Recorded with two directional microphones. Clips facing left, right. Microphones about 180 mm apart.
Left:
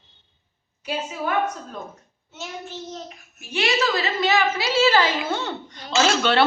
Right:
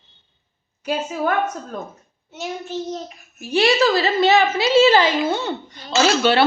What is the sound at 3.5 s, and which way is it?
A woman's voice, 35° right (ahead or behind).